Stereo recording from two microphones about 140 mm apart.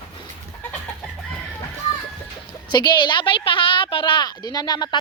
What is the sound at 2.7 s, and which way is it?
A woman's voice, 35° left (ahead or behind).